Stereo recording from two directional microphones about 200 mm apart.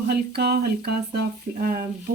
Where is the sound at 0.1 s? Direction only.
55° right (ahead or behind).